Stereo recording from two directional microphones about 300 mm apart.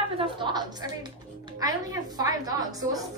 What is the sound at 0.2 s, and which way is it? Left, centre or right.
A woman's voice, centre.